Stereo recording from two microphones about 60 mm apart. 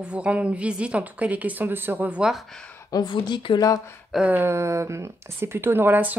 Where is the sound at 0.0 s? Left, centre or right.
Right.